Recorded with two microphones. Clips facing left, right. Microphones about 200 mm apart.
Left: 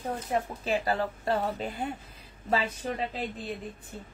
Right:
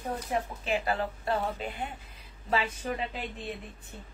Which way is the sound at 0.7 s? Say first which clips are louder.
Left 1 dB; 35° left (ahead or behind).